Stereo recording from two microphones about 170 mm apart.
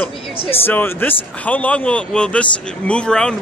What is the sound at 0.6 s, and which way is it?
A man's voice, 10° left (ahead or behind).